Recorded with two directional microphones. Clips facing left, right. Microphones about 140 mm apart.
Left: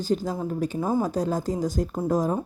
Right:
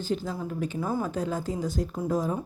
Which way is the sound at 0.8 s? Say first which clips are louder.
Left 5 dB; 20° left (ahead or behind).